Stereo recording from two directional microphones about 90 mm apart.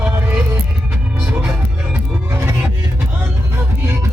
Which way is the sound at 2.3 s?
25° right (ahead or behind).